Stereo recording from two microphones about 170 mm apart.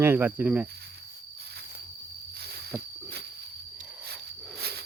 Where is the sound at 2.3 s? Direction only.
70° right (ahead or behind).